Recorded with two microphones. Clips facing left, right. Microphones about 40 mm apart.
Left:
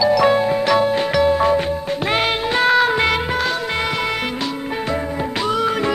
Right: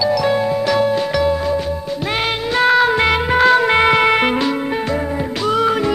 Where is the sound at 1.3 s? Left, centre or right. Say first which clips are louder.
Left 3 dB; left.